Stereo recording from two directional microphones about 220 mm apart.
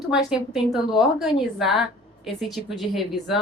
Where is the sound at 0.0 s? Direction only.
Centre (ahead or behind).